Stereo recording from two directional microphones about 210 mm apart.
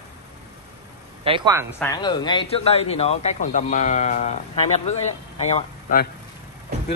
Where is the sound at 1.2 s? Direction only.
25° right (ahead or behind).